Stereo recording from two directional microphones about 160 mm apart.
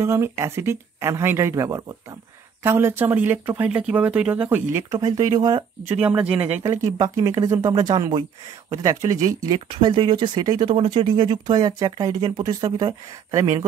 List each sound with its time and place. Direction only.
0.0 s speech: 15° right (ahead or behind)
4.9 s speech: 25° right (ahead or behind)
5.9 s speech: 10° right (ahead or behind)
6.7 s speech: 25° right (ahead or behind)